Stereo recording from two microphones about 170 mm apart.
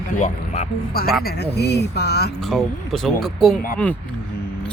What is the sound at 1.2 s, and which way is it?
Speech, 75° left (ahead or behind).